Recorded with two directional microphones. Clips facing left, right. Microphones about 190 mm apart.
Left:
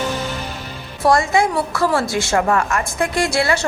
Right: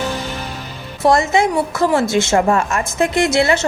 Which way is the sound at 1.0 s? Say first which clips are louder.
Right 2 dB; 20° right (ahead or behind).